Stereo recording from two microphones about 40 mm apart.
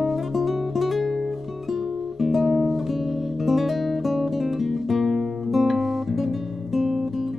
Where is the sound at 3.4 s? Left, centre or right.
Centre.